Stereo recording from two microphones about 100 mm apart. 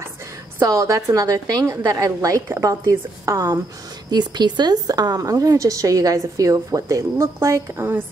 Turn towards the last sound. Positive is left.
turn(degrees=-25)  # may be behind; listen again after turning